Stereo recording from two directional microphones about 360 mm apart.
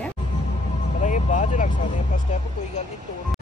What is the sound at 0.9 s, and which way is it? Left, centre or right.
Vehicle, centre.